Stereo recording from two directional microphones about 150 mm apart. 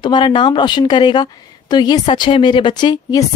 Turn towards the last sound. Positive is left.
turn(degrees=25)  # may be behind; listen again after turning